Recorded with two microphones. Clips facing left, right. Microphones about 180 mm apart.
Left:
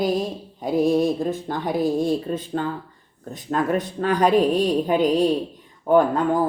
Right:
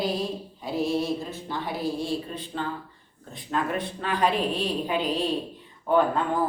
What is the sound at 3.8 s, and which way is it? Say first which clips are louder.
Speech: left 6 dB; 45° left (ahead or behind).